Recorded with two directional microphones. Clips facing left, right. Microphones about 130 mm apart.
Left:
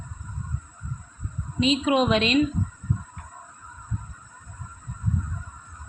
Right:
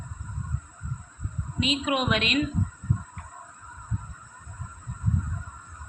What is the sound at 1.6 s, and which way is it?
Speech, 30° left (ahead or behind).